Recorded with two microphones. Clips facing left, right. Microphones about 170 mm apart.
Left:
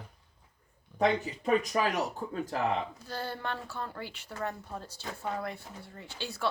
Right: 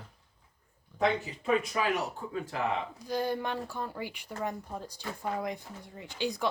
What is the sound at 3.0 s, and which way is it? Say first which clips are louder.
Speech: right 6 dB; 15° right (ahead or behind).